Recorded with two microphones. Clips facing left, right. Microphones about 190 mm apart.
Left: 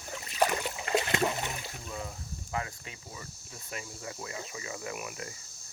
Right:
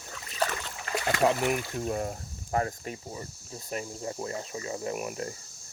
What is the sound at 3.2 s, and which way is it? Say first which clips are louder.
Speech: right 6 dB; 35° right (ahead or behind).